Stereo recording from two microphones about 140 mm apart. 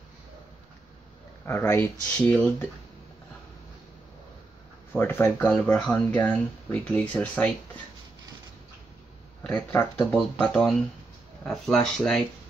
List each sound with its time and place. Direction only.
1.4 s speech: 15° left (ahead or behind)
4.9 s speech: 15° left (ahead or behind)
9.5 s speech: 20° left (ahead or behind)
10.4 s speech: 5° left (ahead or behind)